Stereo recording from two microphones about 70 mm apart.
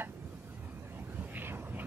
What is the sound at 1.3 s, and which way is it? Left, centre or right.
Vehicle, right.